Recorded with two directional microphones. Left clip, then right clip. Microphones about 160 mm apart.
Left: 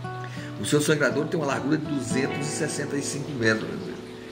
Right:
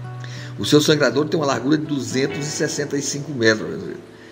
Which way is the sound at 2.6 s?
25° right (ahead or behind).